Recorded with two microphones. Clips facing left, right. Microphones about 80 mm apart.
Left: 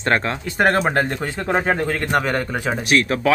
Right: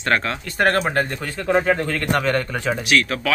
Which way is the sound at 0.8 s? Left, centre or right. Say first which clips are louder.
Left 2 dB; left.